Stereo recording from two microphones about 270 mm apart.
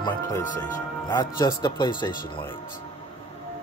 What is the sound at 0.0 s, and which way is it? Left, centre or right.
Speech, centre.